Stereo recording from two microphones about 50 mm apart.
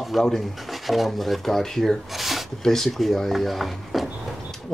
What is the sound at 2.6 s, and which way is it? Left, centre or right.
Speech, centre.